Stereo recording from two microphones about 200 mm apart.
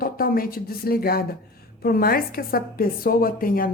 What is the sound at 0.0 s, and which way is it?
A woman's voice, 45° left (ahead or behind).